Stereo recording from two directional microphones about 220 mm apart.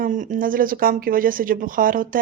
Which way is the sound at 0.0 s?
35° right (ahead or behind).